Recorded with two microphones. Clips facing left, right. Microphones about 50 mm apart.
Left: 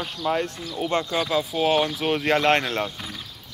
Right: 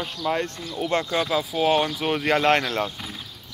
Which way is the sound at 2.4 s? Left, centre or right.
Left.